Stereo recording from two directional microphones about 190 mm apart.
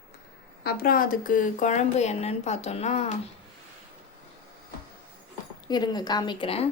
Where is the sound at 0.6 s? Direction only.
55° left (ahead or behind); by 3.2 s 35° left (ahead or behind).